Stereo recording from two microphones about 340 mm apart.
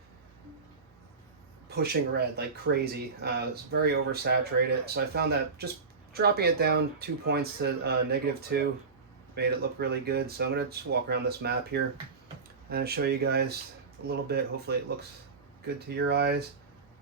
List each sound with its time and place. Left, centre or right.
1.7 s speech: right